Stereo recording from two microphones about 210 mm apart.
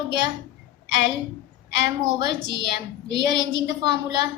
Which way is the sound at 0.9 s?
55° left (ahead or behind).